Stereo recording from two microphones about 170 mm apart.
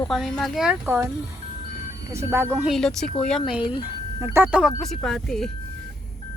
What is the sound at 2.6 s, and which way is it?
Speech, centre (ahead or behind).